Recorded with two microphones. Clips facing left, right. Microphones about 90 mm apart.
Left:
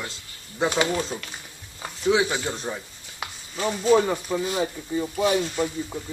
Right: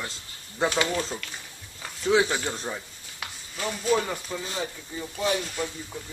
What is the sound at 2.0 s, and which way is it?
A man's voice, 5° left (ahead or behind).